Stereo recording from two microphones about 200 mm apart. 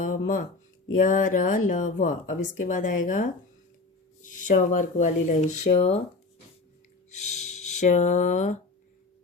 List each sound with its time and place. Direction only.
0.0 s a sound: 40° left (ahead or behind)
1.0 s speech: 40° left (ahead or behind)
7.3 s speech: 35° left (ahead or behind)